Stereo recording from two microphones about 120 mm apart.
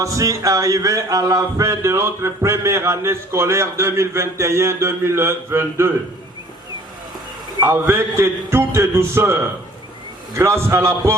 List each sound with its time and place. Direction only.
0.0 s speech: 30° right (ahead or behind)
7.6 s speech: 20° right (ahead or behind)